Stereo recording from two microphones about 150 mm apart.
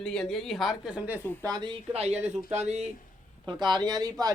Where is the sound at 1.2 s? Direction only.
15° left (ahead or behind).